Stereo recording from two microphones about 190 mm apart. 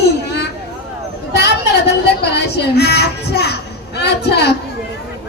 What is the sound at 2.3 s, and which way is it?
Speech, 60° left (ahead or behind).